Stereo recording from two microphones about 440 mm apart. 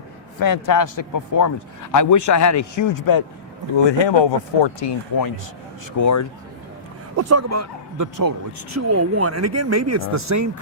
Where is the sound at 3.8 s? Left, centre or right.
Left.